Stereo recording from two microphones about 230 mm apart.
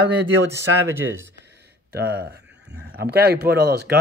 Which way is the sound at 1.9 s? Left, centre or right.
Right.